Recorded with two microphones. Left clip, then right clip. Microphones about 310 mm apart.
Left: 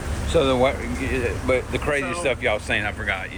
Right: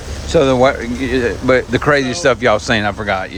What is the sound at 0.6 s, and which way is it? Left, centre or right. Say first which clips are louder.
Speech: right 8 dB; right.